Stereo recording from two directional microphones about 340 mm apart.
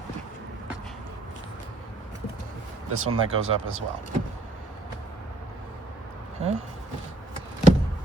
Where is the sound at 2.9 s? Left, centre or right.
Right.